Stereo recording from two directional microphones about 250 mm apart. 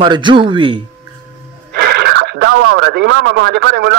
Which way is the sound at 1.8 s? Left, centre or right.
Right.